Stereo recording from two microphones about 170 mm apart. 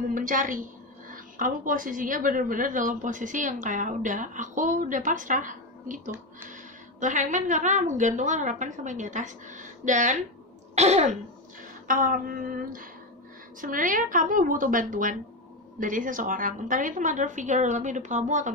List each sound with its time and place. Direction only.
0.1 s a woman's voice: 50° right (ahead or behind)
11.9 s a sound: 55° right (ahead or behind)
13.6 s a woman's voice: 50° right (ahead or behind)